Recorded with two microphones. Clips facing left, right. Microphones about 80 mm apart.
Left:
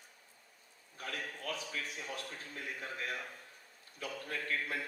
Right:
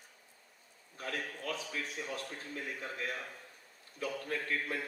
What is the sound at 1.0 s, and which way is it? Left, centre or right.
A man's voice, right.